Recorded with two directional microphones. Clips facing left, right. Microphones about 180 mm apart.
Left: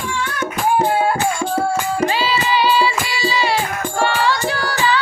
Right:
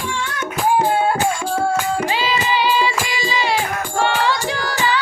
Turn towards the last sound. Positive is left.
turn(degrees=-15)  # may be behind; listen again after turning